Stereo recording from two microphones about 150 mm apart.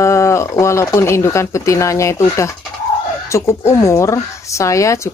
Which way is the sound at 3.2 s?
20° left (ahead or behind).